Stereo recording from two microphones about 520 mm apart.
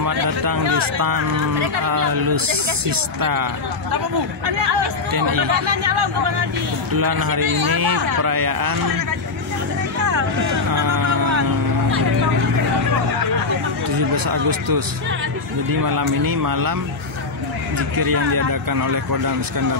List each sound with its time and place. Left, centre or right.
0.0 s a man's voice: right
4.7 s a man's voice: right
10.7 s vehicle: right
13.8 s speech: right
15.8 s a man's voice: right
17.7 s a man's voice: right